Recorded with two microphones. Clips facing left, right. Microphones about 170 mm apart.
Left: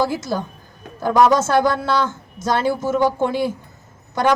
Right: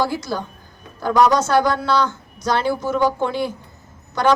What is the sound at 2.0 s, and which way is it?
Speech, 50° left (ahead or behind).